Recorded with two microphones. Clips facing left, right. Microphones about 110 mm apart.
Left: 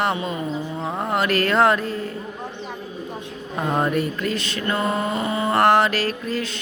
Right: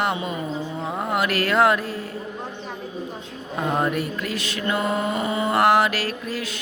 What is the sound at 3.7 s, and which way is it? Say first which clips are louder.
Mantra: left 2 dB; centre (ahead or behind).